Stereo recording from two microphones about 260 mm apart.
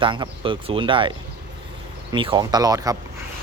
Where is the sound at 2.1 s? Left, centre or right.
Centre.